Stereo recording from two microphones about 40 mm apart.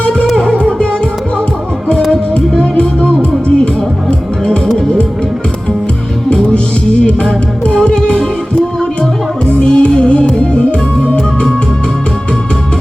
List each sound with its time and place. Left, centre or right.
0.3 s music: left
2.3 s music: left
7.7 s music: left
9.6 s music: left